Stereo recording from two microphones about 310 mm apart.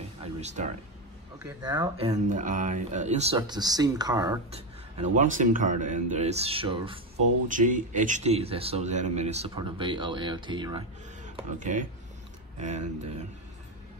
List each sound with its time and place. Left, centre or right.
0.2 s music: right
1.4 s speech: centre